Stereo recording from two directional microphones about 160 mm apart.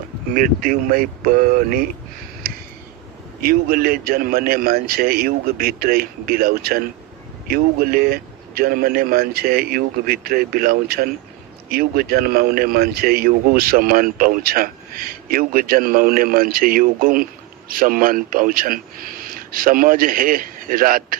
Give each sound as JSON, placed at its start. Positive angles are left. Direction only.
{"t": 0.3, "sound": "speech", "side_deg": -60}
{"t": 2.4, "sound": "a sound", "side_deg": -70}
{"t": 3.4, "sound": "a man's voice", "side_deg": -65}